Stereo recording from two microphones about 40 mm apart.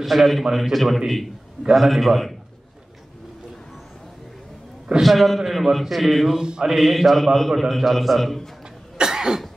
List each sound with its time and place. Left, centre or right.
0.0 s a man's voice: centre
5.0 s a man's voice: centre
6.3 s mantra: centre
6.7 s a man's voice: centre
8.9 s cough: centre